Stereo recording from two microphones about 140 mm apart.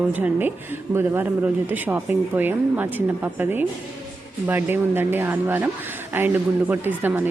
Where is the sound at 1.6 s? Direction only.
10° right (ahead or behind).